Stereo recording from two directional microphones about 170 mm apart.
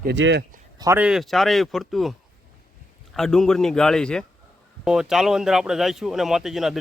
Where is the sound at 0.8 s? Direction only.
15° right (ahead or behind).